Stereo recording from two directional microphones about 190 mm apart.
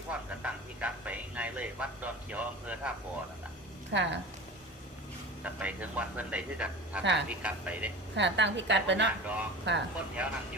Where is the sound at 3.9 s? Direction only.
65° right (ahead or behind).